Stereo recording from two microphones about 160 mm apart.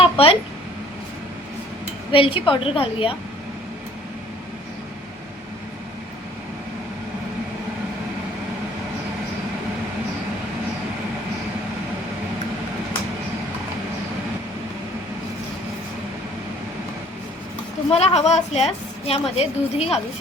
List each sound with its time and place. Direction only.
0.0 s a sound: 35° left (ahead or behind)
2.1 s a woman's voice: 35° left (ahead or behind)
17.9 s a woman's voice: 40° left (ahead or behind)